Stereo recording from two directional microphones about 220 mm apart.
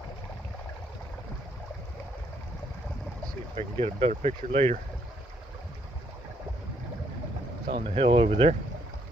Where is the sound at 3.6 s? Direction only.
25° right (ahead or behind).